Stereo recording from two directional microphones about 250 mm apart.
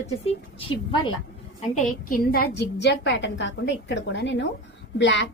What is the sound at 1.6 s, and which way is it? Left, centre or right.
A woman's voice, left.